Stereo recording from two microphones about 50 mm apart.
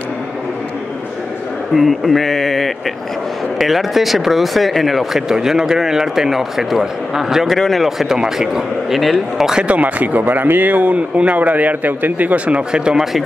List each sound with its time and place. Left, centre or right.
1.8 s speech: centre
7.5 s speech: centre
9.7 s speech: right
12.7 s speech: centre